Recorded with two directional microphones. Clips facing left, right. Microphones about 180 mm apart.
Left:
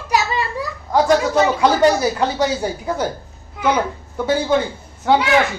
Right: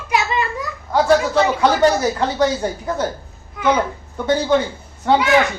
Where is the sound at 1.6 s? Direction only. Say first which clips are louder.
Even; 10° left (ahead or behind).